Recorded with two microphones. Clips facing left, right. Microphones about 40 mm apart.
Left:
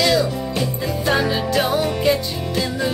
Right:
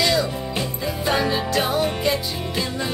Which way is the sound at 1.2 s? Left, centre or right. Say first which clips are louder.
Left 2 dB; centre.